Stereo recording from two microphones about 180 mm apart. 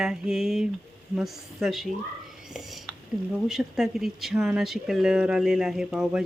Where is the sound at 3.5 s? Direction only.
Centre (ahead or behind).